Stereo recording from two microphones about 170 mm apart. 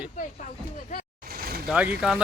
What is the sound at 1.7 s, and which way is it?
Speech, 5° right (ahead or behind).